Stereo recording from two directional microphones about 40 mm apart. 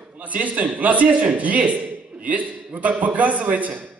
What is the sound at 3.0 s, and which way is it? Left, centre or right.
Speech, right.